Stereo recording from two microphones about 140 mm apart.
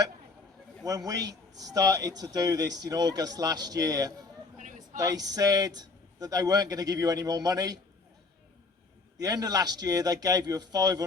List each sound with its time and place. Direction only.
0.9 s a man's voice: 25° right (ahead or behind)
4.6 s a sound: 65° right (ahead or behind)
4.9 s a man's voice: 25° right (ahead or behind)
9.2 s a man's voice: 25° right (ahead or behind)